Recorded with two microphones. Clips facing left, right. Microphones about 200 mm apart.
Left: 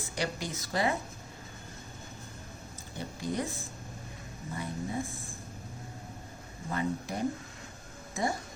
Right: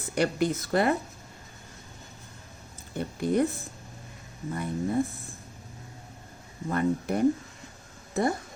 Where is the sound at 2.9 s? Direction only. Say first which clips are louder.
Right 9 dB; 55° right (ahead or behind).